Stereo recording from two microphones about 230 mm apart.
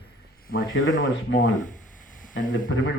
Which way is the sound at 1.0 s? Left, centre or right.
Left.